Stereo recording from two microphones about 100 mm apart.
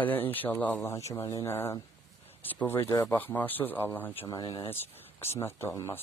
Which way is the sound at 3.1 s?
20° left (ahead or behind).